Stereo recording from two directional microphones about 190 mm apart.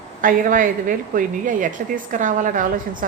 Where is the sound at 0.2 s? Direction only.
45° right (ahead or behind).